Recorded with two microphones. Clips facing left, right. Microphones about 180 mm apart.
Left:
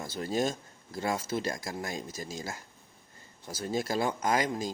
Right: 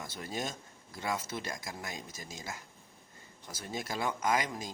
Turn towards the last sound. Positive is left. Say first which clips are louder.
# left 3 dB
turn(degrees=35)  # may be behind; listen again after turning